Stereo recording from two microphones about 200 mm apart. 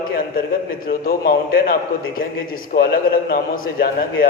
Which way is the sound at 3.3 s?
45° left (ahead or behind).